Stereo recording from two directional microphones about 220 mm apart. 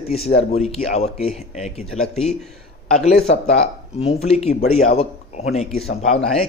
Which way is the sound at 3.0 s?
30° left (ahead or behind).